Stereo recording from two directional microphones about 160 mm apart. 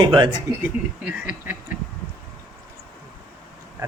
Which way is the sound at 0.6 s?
10° right (ahead or behind).